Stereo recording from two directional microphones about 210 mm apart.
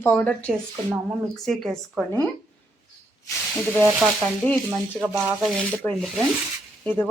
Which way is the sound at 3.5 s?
Centre (ahead or behind).